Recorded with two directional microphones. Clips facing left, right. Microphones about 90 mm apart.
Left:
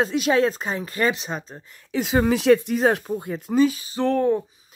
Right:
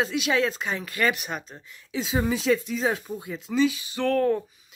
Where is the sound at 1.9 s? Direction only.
60° left (ahead or behind); by 4.4 s 20° left (ahead or behind).